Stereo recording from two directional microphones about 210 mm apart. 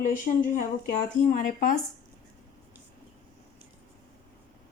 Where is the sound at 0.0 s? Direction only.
40° left (ahead or behind).